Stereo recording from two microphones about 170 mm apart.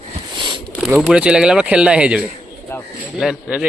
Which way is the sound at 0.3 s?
30° right (ahead or behind).